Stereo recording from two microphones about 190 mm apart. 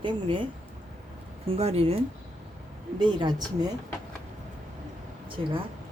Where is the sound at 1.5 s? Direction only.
30° right (ahead or behind).